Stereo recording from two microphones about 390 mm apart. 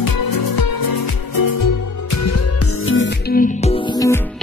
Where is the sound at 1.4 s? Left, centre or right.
Left.